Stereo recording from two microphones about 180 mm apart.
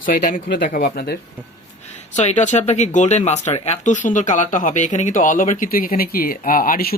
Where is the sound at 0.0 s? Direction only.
45° left (ahead or behind).